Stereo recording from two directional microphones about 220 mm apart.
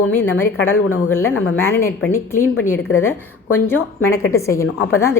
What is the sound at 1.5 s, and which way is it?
A woman's voice, 10° left (ahead or behind).